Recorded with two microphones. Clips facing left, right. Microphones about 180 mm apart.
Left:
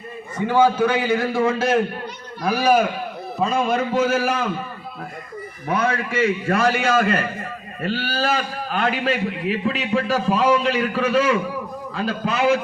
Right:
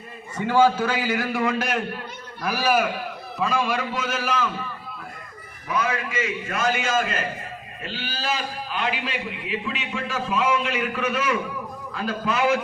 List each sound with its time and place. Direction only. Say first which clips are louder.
0.4 s a man's voice: left 2 dB; 15° left (ahead or behind)
3.3 s a man's voice: left 4 dB; 45° left (ahead or behind)
5.6 s a man's voice: left 4 dB; 60° left (ahead or behind); by 12.5 s 30° left (ahead or behind)